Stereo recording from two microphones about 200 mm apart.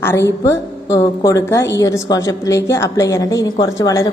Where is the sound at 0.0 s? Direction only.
15° left (ahead or behind).